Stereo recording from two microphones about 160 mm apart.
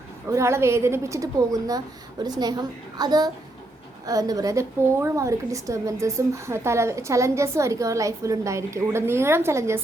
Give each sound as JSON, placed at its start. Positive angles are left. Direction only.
{"t": 0.3, "sound": "a woman's voice", "side_deg": -15}